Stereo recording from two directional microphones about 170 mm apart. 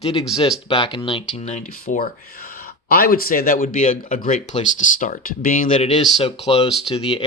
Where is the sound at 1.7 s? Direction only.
55° left (ahead or behind).